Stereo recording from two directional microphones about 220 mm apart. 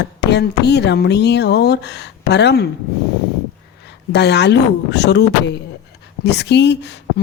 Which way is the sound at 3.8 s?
50° left (ahead or behind).